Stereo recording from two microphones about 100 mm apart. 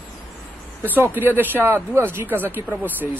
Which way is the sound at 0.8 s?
20° right (ahead or behind).